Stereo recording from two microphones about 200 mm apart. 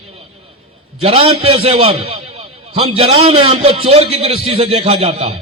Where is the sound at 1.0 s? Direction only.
30° right (ahead or behind).